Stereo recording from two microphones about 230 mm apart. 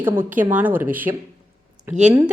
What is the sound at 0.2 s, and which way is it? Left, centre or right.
Speech, centre.